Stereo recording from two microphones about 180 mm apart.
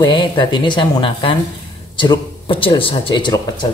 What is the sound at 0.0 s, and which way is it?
A woman's voice, 25° left (ahead or behind).